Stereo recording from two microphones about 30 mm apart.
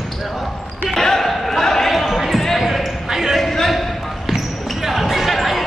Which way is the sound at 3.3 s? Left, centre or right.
Centre.